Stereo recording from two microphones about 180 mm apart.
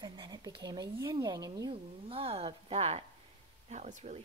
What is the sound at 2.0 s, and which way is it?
A woman's voice, 30° right (ahead or behind).